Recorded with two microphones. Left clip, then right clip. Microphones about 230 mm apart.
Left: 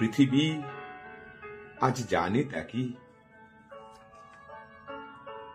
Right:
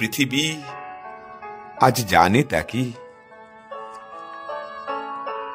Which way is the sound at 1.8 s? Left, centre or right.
Right.